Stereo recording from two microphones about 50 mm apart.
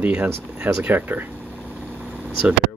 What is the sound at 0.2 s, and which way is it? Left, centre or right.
Speech, right.